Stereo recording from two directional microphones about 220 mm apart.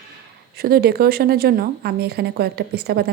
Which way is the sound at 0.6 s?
45° right (ahead or behind).